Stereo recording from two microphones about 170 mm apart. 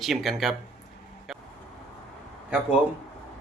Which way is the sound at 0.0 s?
Centre (ahead or behind).